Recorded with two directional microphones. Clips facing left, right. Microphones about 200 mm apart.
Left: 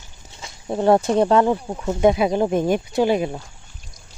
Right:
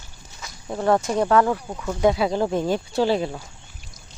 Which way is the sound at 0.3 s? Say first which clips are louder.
Left 5 dB; 25° left (ahead or behind).